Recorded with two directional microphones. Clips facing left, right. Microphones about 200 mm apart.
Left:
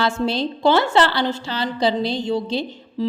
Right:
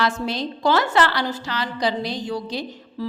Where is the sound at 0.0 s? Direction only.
30° left (ahead or behind).